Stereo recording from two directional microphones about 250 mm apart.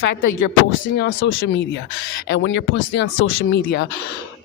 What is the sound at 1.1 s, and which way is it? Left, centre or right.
A woman's voice, left.